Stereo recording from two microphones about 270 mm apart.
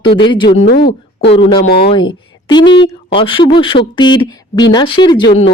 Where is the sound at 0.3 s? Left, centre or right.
Centre.